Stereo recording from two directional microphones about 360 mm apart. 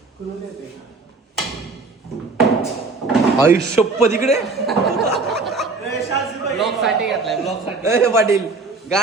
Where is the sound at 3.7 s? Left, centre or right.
Centre.